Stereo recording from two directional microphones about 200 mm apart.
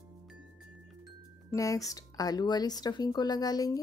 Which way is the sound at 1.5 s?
15° left (ahead or behind).